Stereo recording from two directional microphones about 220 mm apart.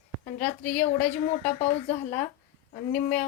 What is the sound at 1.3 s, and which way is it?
Speech, 30° left (ahead or behind).